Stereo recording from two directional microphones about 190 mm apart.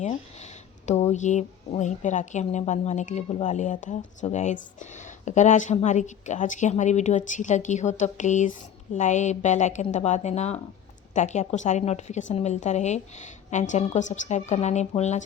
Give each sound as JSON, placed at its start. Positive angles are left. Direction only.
{"t": 0.0, "sound": "a woman's voice", "side_deg": 35}